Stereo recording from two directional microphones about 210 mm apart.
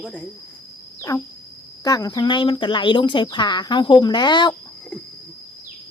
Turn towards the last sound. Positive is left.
turn(degrees=20)  # may be behind; listen again after turning